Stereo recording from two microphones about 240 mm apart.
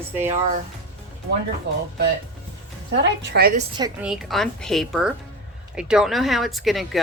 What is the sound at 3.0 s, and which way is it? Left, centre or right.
Speech, right.